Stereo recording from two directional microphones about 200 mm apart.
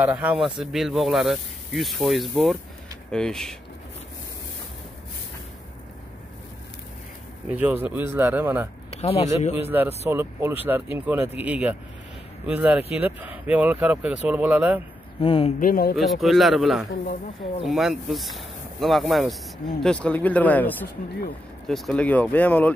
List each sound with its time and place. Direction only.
0.0 s speech: 5° right (ahead or behind)
7.4 s speech: 10° right (ahead or behind)
8.9 s speech: 30° left (ahead or behind)
9.7 s speech: 10° right (ahead or behind)
15.1 s speech: 25° left (ahead or behind)
15.6 s speech: 45° left (ahead or behind)
16.0 s speech: centre (ahead or behind)